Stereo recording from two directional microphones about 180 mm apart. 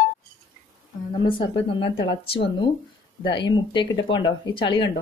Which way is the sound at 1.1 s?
25° left (ahead or behind).